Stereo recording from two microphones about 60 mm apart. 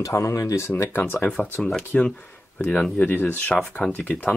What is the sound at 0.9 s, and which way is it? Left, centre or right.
Speech, left.